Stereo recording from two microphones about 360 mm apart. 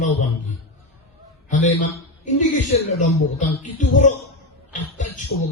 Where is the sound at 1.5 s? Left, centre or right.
Left.